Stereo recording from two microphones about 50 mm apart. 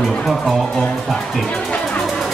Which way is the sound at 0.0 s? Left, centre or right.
Centre.